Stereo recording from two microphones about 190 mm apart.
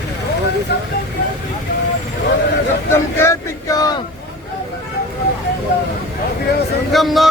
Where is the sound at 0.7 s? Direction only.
60° left (ahead or behind).